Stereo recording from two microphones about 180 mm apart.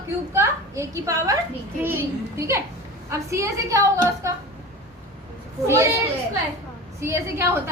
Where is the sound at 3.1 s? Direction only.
15° right (ahead or behind).